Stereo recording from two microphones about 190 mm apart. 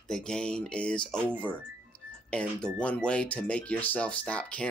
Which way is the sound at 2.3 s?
5° left (ahead or behind).